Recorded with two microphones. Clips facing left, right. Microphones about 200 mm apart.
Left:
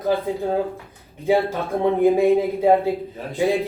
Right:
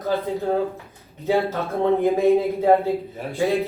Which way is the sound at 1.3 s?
15° left (ahead or behind).